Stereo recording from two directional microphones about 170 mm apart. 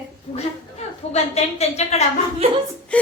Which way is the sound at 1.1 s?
40° left (ahead or behind).